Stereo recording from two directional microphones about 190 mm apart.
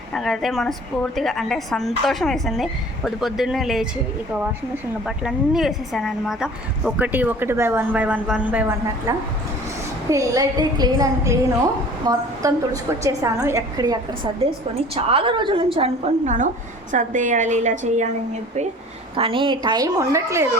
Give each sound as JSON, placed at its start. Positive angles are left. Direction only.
{"t": 0.1, "sound": "a woman's voice", "side_deg": 0}
{"t": 5.0, "sound": "a woman's voice", "side_deg": 0}
{"t": 19.1, "sound": "a woman's voice", "side_deg": -30}